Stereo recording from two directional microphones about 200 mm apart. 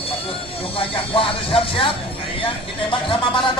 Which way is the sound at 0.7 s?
25° left (ahead or behind).